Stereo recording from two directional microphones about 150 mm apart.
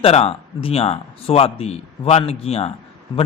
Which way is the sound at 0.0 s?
45° left (ahead or behind).